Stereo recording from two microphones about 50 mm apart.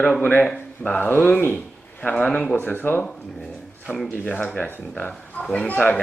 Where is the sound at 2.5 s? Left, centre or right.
Left.